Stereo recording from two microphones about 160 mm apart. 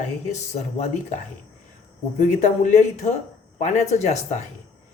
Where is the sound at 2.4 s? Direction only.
45° left (ahead or behind).